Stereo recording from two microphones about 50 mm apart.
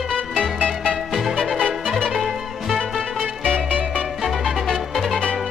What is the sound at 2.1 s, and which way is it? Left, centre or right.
Music, centre.